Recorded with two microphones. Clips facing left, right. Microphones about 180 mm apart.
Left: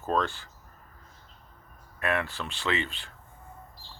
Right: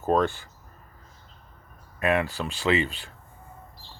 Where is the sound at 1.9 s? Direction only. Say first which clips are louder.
Right 5 dB; 15° right (ahead or behind).